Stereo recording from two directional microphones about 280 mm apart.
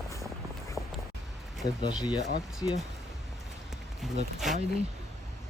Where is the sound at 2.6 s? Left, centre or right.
Centre.